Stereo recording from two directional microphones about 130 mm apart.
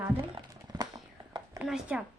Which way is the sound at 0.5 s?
30° right (ahead or behind).